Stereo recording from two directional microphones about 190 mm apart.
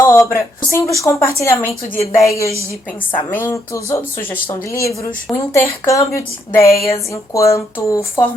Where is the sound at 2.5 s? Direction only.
15° right (ahead or behind).